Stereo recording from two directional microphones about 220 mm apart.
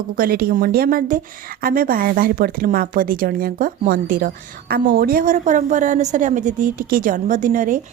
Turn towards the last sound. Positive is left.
turn(degrees=-35)  # may be behind; listen again after turning